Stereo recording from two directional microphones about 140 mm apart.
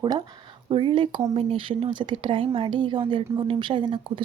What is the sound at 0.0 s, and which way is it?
Speech, 30° right (ahead or behind).